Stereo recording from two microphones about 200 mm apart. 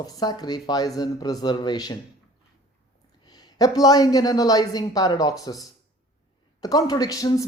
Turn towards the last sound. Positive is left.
turn(degrees=15)  # may be behind; listen again after turning